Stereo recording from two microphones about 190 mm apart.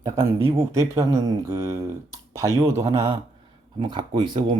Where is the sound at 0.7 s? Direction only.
15° right (ahead or behind).